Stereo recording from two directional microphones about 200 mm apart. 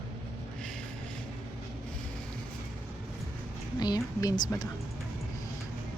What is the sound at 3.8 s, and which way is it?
Speech, 20° left (ahead or behind).